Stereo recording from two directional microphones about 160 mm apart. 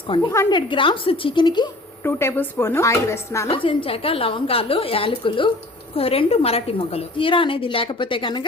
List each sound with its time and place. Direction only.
0.3 s speech: 20° left (ahead or behind)
0.7 s a woman's voice: 30° left (ahead or behind)
2.0 s speech: 15° left (ahead or behind)
3.5 s a woman's voice: 35° left (ahead or behind)